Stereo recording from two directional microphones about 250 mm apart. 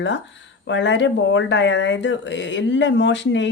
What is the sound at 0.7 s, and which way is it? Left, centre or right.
Speech, left.